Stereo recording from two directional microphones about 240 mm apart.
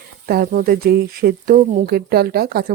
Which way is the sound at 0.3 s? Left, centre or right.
Right.